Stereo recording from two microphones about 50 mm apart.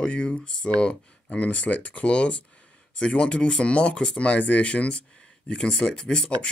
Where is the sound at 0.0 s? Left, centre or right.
Left.